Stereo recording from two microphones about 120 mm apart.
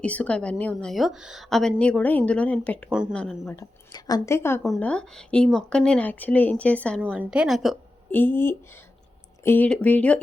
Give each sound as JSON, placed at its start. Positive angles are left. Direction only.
{"t": 0.0, "sound": "a woman's voice", "side_deg": 10}
{"t": 3.4, "sound": "a woman's voice", "side_deg": 20}
{"t": 3.9, "sound": "a woman's voice", "side_deg": 35}
{"t": 4.3, "sound": "a woman's voice", "side_deg": 20}
{"t": 4.8, "sound": "speech", "side_deg": 10}
{"t": 7.2, "sound": "a woman's voice", "side_deg": -10}
{"t": 8.1, "sound": "speech", "side_deg": 15}